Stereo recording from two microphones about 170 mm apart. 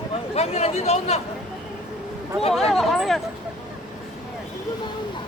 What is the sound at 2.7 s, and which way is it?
Speech, centre (ahead or behind).